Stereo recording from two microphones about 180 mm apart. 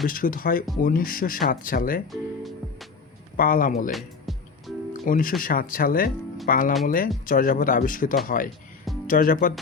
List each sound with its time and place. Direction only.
0.0 s speech: 50° left (ahead or behind)
3.3 s speech: 50° left (ahead or behind)
3.9 s music: centre (ahead or behind)
5.0 s speech: 50° left (ahead or behind)